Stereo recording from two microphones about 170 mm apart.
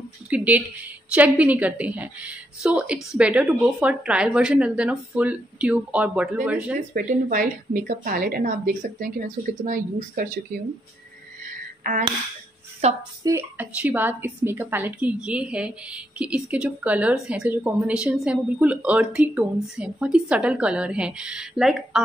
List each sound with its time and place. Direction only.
0.3 s a woman's voice: 10° right (ahead or behind)
6.8 s a woman's voice: 50° right (ahead or behind)
12.8 s speech: 40° right (ahead or behind)
13.2 s a woman's voice: 15° right (ahead or behind)